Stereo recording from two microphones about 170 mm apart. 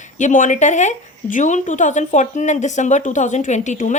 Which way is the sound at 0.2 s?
45° left (ahead or behind).